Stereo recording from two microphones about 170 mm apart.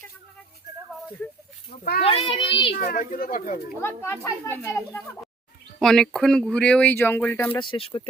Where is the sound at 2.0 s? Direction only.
35° left (ahead or behind).